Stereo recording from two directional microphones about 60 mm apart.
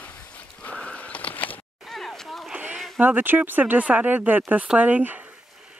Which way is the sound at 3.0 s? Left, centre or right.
Right.